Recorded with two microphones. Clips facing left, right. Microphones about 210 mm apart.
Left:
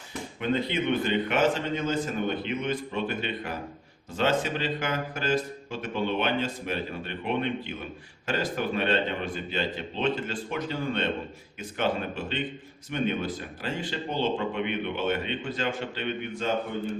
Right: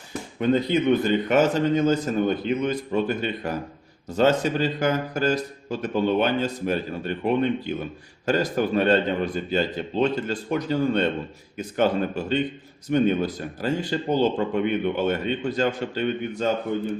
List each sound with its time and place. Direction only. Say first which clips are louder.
0.3 s a man's voice: right 7 dB; 40° right (ahead or behind)